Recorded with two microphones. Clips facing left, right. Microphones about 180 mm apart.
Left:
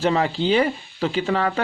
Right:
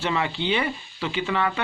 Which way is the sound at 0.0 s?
40° left (ahead or behind).